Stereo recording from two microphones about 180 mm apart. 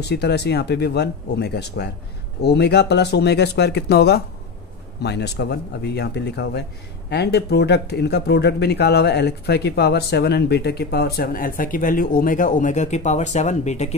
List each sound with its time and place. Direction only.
0.0 s speech: 65° left (ahead or behind); by 13.8 s 40° left (ahead or behind)